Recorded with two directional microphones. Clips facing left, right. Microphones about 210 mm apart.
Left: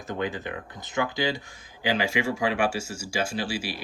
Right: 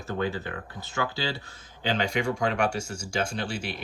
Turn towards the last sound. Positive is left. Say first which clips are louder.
# left 2 dB
turn(degrees=5)  # may be behind; listen again after turning